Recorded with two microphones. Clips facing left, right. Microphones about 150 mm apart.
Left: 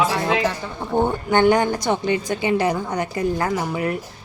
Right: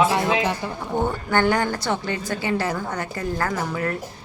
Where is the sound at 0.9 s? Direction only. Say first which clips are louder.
Left 4 dB; 20° left (ahead or behind).